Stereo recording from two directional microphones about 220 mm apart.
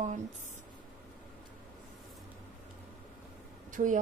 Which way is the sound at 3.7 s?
35° right (ahead or behind).